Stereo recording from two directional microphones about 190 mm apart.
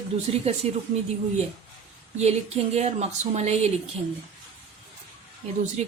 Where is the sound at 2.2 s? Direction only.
35° right (ahead or behind).